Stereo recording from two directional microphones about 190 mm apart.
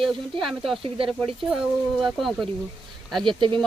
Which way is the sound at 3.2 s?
25° right (ahead or behind).